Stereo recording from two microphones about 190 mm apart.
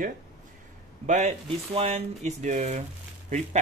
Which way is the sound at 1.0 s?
40° right (ahead or behind).